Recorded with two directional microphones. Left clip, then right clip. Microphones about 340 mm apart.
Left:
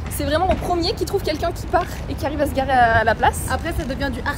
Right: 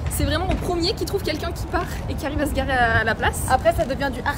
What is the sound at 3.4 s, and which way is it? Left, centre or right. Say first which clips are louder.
Speech: right 6 dB; right.